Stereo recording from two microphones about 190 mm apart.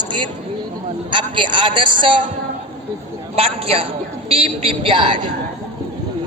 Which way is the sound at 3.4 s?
30° right (ahead or behind).